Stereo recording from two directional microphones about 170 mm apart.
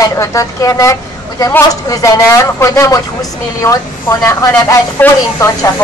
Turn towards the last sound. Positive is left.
turn(degrees=15)  # may be behind; listen again after turning